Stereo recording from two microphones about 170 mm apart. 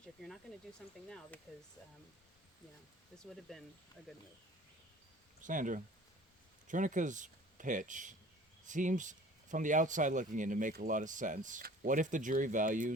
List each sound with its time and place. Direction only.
1.5 s speech: 5° left (ahead or behind)
3.5 s speech: centre (ahead or behind)
5.4 s speech: 50° right (ahead or behind)